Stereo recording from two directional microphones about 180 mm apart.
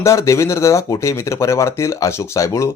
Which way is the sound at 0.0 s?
15° left (ahead or behind).